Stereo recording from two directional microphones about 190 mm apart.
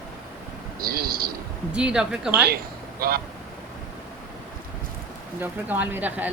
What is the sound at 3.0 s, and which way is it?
Speech, 50° right (ahead or behind).